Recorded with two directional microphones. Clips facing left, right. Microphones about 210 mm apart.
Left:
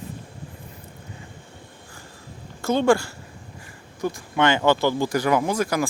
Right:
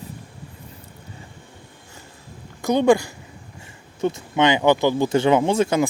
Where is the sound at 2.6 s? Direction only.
15° right (ahead or behind).